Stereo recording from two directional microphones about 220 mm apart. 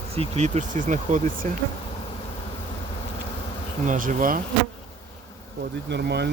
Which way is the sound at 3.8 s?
35° right (ahead or behind).